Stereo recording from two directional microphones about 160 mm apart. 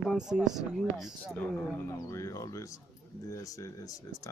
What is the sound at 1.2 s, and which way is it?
Speech, 10° left (ahead or behind).